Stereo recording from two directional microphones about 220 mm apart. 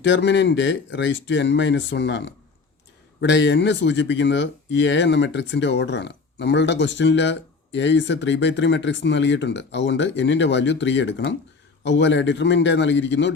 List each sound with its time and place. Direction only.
0.0 s speech: 55° left (ahead or behind)